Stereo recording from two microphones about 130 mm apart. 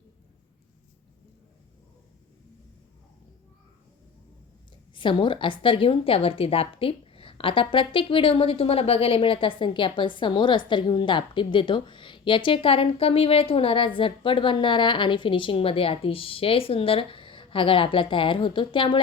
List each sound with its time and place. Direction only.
4.9 s a woman's voice: 40° left (ahead or behind)